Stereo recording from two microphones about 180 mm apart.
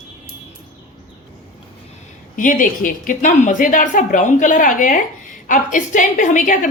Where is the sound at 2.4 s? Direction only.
45° left (ahead or behind).